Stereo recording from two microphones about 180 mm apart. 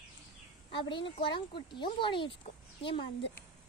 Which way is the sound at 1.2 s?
25° left (ahead or behind).